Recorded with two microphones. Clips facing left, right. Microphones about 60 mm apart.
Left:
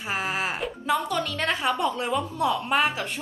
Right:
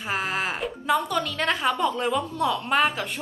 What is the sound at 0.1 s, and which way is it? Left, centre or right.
A woman's voice, centre.